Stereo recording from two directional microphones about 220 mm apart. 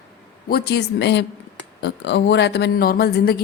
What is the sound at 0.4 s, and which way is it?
A woman's voice, 45° left (ahead or behind).